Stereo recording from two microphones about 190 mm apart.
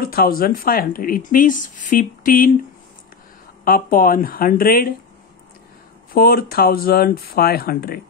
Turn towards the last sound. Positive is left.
turn(degrees=55)  # may be behind; listen again after turning